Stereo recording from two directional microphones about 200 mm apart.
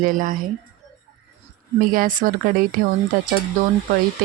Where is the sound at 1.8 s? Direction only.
45° right (ahead or behind).